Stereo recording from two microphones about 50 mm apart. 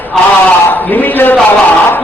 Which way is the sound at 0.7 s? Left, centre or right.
Left.